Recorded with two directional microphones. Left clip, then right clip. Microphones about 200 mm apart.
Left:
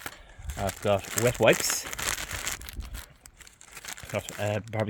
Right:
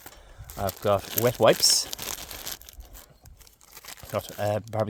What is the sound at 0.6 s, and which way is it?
Speech, 45° right (ahead or behind).